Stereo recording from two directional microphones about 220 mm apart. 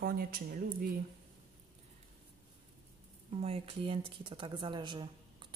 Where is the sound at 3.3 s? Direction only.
25° right (ahead or behind).